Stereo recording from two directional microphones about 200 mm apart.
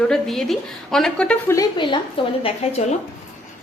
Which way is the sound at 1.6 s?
25° left (ahead or behind).